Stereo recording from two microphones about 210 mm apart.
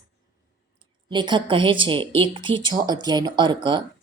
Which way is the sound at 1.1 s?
20° right (ahead or behind).